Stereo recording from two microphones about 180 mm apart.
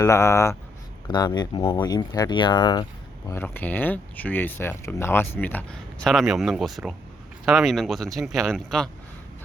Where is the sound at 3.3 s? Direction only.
10° left (ahead or behind).